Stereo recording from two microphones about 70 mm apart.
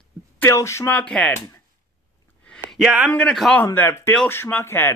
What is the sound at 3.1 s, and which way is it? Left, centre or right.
Speech, centre.